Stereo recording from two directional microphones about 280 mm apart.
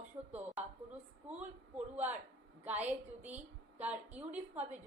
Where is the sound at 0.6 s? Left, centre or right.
Centre.